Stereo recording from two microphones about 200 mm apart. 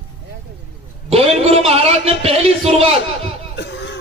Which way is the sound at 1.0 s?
30° right (ahead or behind).